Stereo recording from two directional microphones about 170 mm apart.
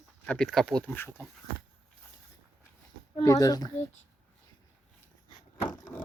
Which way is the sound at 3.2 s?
20° left (ahead or behind).